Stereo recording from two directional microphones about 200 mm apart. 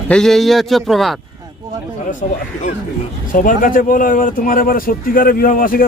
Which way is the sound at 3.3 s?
40° left (ahead or behind).